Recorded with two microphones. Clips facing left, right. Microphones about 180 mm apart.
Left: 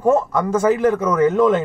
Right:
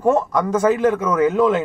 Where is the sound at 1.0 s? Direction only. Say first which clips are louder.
Left 1 dB; 10° right (ahead or behind).